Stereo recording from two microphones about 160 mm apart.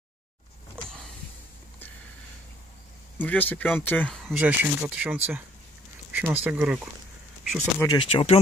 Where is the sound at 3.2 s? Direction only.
10° left (ahead or behind).